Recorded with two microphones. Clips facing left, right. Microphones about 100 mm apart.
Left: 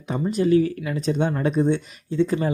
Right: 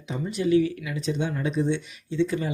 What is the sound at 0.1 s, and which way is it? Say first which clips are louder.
Speech: left 3 dB; 40° left (ahead or behind).